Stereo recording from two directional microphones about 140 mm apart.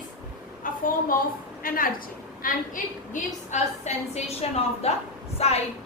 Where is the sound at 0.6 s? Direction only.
75° left (ahead or behind).